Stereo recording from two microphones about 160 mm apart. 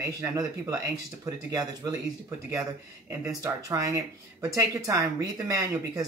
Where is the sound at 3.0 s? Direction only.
20° right (ahead or behind).